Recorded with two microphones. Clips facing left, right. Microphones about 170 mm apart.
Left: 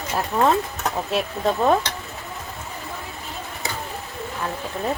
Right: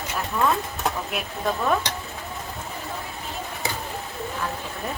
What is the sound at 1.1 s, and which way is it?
Speech, 30° left (ahead or behind).